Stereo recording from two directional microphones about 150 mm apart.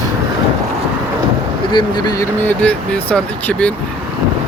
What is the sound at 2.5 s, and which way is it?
Speech, 10° left (ahead or behind).